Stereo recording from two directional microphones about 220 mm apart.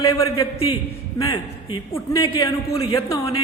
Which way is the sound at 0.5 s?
25° left (ahead or behind).